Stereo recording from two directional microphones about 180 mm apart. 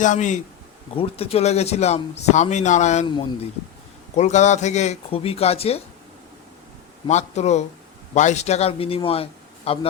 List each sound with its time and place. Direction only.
0.0 s a man's voice: 45° left (ahead or behind)
4.1 s a man's voice: 40° left (ahead or behind)
7.1 s a man's voice: 40° left (ahead or behind)